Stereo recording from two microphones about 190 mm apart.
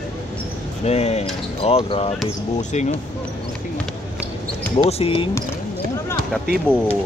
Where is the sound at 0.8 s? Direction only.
35° left (ahead or behind).